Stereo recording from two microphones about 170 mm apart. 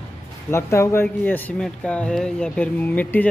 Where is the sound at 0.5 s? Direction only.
15° left (ahead or behind).